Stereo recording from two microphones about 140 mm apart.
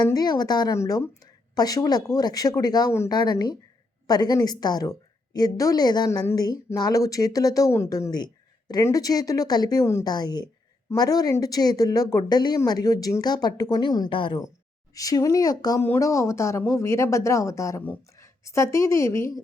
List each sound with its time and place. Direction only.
0.0 s speech: 30° left (ahead or behind)
14.9 s a woman's voice: 25° left (ahead or behind)